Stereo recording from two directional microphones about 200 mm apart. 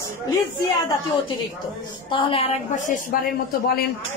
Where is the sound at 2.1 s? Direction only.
25° left (ahead or behind).